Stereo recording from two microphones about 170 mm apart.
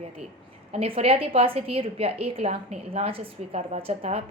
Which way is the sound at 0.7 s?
35° right (ahead or behind).